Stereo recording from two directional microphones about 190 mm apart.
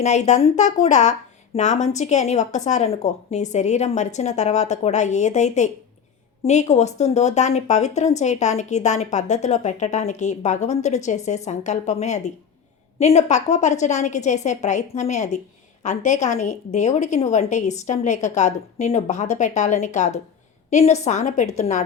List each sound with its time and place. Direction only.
0.0 s a woman's voice: 35° left (ahead or behind)